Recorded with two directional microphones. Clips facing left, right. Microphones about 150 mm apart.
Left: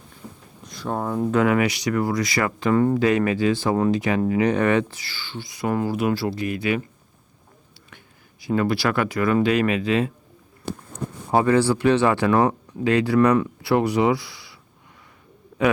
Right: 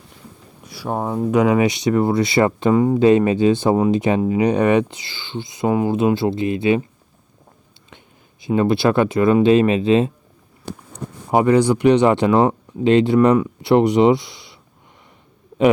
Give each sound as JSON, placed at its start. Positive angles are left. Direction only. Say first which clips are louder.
{"t": 0.6, "sound": "speech", "louder": "right 3 dB", "side_deg": -10}
{"t": 7.9, "sound": "speech", "louder": "right 5 dB", "side_deg": -20}
{"t": 11.3, "sound": "speech", "louder": "right 4 dB", "side_deg": -15}